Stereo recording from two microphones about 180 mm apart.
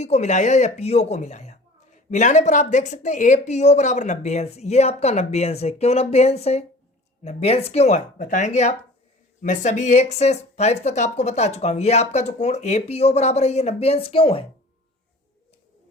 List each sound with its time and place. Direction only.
0.0 s speech: 40° left (ahead or behind)